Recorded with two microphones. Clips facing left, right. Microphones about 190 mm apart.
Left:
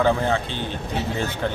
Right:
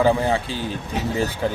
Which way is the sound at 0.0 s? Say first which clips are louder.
Right 2 dB; 10° right (ahead or behind).